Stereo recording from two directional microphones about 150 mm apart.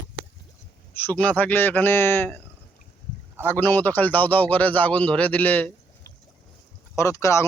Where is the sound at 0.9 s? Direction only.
10° left (ahead or behind).